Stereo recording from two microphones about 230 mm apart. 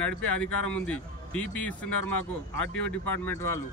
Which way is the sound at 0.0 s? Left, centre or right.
Centre.